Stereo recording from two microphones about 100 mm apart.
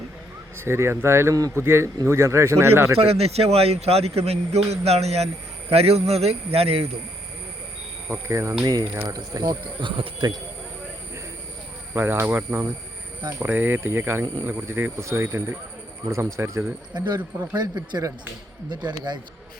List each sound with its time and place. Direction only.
0.5 s speech: 25° right (ahead or behind)
3.0 s a man's voice: 90° right
8.0 s speech: 30° right (ahead or behind)
8.6 s speech: 40° right (ahead or behind)
9.4 s speech: 50° right (ahead or behind)
11.9 s speech: 20° right (ahead or behind)
17.5 s speech: 45° right (ahead or behind)